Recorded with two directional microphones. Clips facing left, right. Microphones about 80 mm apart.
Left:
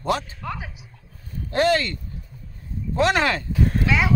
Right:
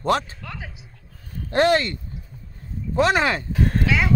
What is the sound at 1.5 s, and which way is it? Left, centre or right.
Speech, right.